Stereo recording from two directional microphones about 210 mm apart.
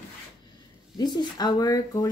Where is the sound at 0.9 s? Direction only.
20° left (ahead or behind).